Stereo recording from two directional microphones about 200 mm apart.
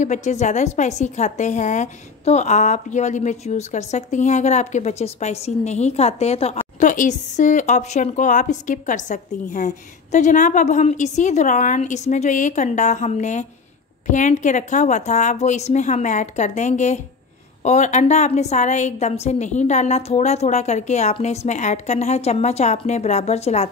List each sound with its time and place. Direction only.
0.0 s a woman's voice: 35° left (ahead or behind)